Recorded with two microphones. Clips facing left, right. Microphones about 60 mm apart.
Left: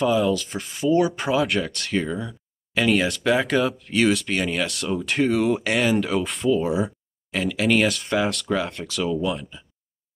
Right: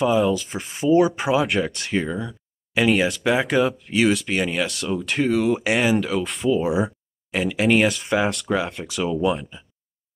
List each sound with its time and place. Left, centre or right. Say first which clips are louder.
0.2 s speech: right 1 dB; centre
5.6 s speech: right 1 dB; centre
5.9 s speech: even; centre
8.8 s speech: right 2 dB; centre